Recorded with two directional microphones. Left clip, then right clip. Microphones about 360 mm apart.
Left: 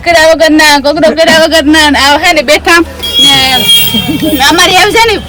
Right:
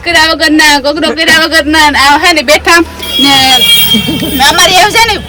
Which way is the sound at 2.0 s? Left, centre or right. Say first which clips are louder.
Even; right.